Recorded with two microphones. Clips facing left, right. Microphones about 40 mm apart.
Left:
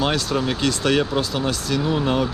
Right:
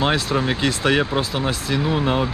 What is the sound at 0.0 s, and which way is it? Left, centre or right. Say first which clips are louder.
Speech: right 1 dB; right.